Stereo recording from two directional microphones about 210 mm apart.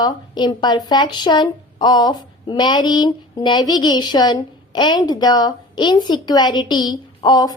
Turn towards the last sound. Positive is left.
turn(degrees=20)  # may be behind; listen again after turning